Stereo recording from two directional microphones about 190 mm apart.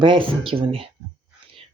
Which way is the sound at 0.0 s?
25° right (ahead or behind).